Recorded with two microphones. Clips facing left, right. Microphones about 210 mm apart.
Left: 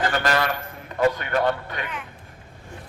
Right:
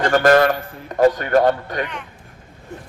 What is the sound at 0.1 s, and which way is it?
A man's voice, 50° right (ahead or behind).